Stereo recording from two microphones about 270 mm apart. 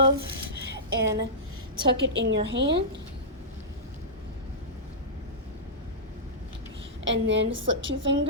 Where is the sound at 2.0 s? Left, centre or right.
Right.